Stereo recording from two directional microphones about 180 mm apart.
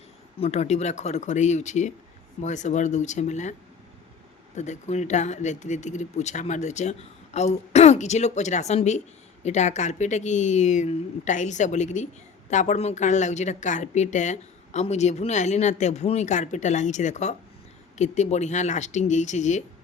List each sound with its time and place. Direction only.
0.3 s a woman's voice: 35° left (ahead or behind)
4.5 s a woman's voice: 40° left (ahead or behind)